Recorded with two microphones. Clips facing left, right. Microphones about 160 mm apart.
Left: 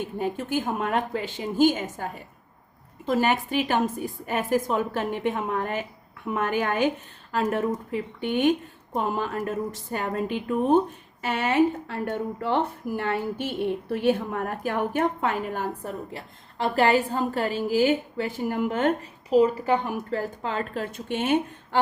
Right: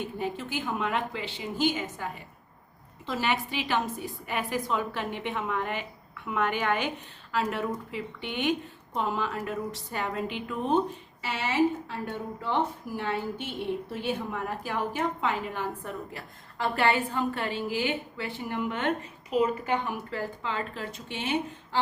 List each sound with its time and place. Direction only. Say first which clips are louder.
0.0 s a woman's voice: left 4 dB; 45° left (ahead or behind)